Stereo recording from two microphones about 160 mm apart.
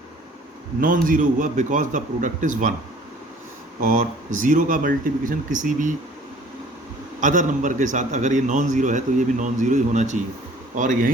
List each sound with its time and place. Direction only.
0.8 s a man's voice: 60° right (ahead or behind)
3.8 s a man's voice: 55° right (ahead or behind)
7.2 s a man's voice: 50° right (ahead or behind)